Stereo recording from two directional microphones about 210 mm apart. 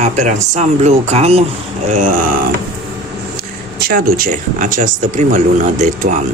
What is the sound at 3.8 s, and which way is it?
Speech, 45° right (ahead or behind).